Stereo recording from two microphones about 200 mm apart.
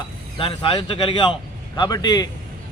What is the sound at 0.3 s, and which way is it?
A man's voice, 25° left (ahead or behind).